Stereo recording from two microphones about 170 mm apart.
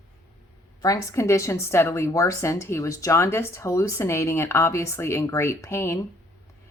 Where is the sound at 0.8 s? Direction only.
20° left (ahead or behind).